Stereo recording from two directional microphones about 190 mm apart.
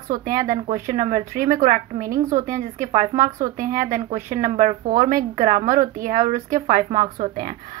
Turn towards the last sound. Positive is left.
turn(degrees=-45)  # may be behind; listen again after turning